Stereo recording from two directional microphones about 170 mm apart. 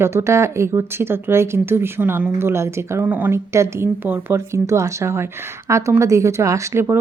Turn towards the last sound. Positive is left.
turn(degrees=-15)  # may be behind; listen again after turning